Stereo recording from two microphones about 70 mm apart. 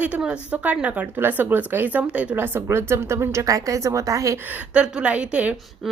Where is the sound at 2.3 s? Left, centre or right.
Right.